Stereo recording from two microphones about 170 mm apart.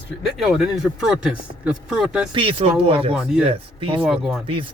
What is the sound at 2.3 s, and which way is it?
Speech, 30° right (ahead or behind).